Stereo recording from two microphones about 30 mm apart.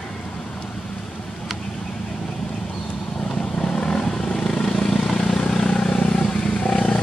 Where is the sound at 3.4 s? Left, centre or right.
Left.